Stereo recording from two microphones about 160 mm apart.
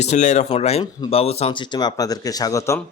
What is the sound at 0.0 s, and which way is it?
Speech, 45° left (ahead or behind).